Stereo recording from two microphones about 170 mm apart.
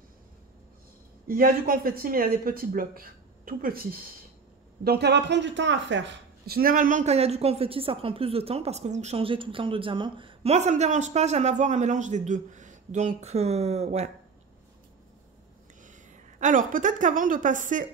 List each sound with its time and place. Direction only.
1.2 s speech: 55° right (ahead or behind)
4.8 s speech: 75° right (ahead or behind); by 14.1 s 40° right (ahead or behind)
16.3 s a woman's voice: 50° right (ahead or behind)